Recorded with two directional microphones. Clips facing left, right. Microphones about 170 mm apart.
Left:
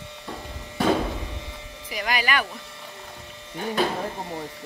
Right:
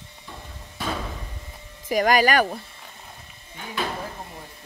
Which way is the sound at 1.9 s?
45° right (ahead or behind).